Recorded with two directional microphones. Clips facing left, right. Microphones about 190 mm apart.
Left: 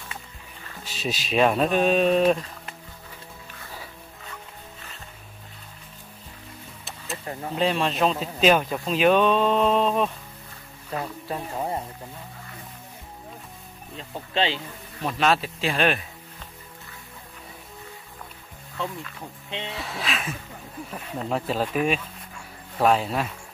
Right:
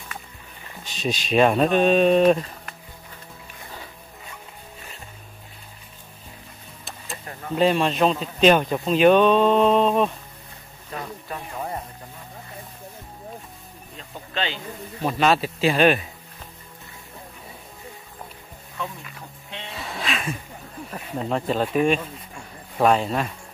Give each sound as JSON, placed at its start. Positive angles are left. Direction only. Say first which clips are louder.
{"t": 0.8, "sound": "speech", "louder": "right 3 dB", "side_deg": 5}
{"t": 7.5, "sound": "speech", "louder": "right 4 dB", "side_deg": 0}
{"t": 10.9, "sound": "a sound", "louder": "left 3 dB", "side_deg": 35}
{"t": 11.2, "sound": "speech", "louder": "left 3 dB", "side_deg": 25}
{"t": 14.3, "sound": "speech", "louder": "left 4 dB", "side_deg": 30}
{"t": 15.0, "sound": "speech", "louder": "right 3 dB", "side_deg": 0}
{"t": 19.8, "sound": "speech", "louder": "right 5 dB", "side_deg": 0}